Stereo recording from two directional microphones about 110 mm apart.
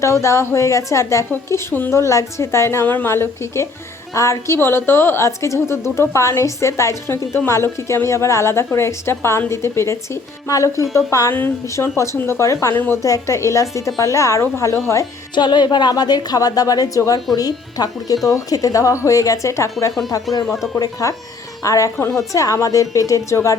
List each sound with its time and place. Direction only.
0.0 s a woman's voice: 25° left (ahead or behind)
15.4 s a woman's voice: 40° left (ahead or behind)
20.7 s a woman's voice: 35° left (ahead or behind)